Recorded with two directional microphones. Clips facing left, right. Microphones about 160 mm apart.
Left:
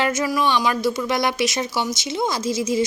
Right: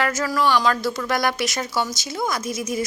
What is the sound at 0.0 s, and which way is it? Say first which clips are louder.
Speech: left 1 dB; 20° left (ahead or behind).